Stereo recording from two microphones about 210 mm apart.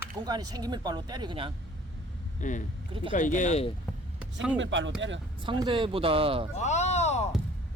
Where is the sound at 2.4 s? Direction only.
35° left (ahead or behind).